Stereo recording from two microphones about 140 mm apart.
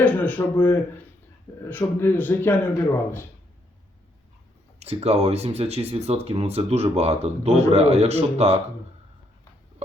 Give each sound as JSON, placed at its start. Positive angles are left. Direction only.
{"t": 0.0, "sound": "a man's voice", "side_deg": 10}
{"t": 1.5, "sound": "speech", "side_deg": 35}
{"t": 2.0, "sound": "a man's voice", "side_deg": 15}
{"t": 4.8, "sound": "speech", "side_deg": -50}